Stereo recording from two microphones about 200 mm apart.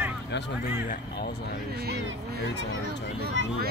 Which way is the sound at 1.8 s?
50° right (ahead or behind).